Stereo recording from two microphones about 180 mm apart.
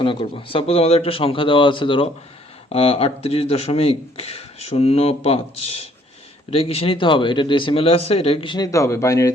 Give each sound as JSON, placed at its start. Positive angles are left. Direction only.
{"t": 0.0, "sound": "speech", "side_deg": 30}